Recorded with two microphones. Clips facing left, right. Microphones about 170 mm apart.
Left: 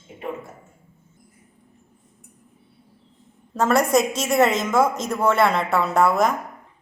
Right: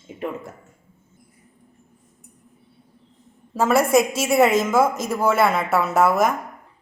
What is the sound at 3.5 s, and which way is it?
A woman's voice, 5° right (ahead or behind).